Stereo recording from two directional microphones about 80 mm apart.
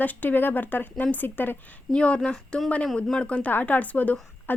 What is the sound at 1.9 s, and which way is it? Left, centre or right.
A woman's voice, centre.